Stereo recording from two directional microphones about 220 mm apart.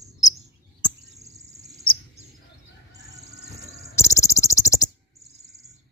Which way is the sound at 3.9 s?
15° left (ahead or behind).